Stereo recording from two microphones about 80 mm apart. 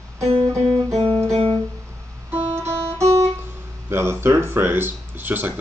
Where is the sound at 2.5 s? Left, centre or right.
Right.